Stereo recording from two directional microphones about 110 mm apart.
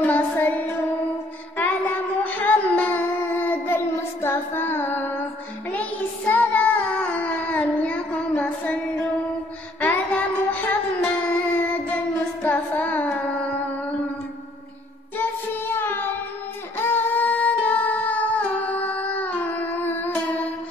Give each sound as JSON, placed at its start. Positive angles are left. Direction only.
{"t": 0.0, "sound": "child singing", "side_deg": 15}
{"t": 9.8, "sound": "music", "side_deg": 15}
{"t": 11.6, "sound": "child singing", "side_deg": 15}
{"t": 12.4, "sound": "carnatic music", "side_deg": 15}
{"t": 15.1, "sound": "child singing", "side_deg": 20}
{"t": 16.7, "sound": "music", "side_deg": 20}